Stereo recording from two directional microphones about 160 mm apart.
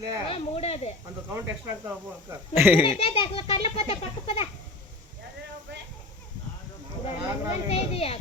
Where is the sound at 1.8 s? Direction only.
15° right (ahead or behind).